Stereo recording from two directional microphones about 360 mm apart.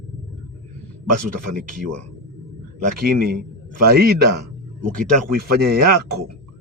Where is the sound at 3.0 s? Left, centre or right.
Right.